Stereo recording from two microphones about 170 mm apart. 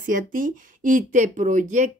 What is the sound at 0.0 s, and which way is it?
Speech, 50° right (ahead or behind).